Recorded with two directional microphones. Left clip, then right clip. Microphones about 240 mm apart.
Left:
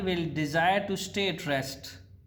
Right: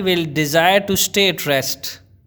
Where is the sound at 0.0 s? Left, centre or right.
Right.